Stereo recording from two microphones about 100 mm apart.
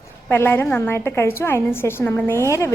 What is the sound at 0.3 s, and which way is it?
A woman's voice, 20° left (ahead or behind).